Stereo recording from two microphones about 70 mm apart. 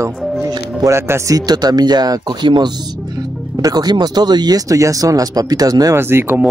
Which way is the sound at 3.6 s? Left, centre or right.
Right.